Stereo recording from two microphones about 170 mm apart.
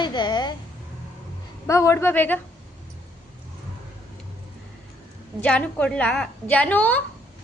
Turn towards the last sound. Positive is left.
turn(degrees=10)  # may be behind; listen again after turning